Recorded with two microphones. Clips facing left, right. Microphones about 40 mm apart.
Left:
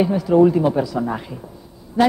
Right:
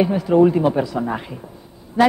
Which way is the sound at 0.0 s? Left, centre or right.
Right.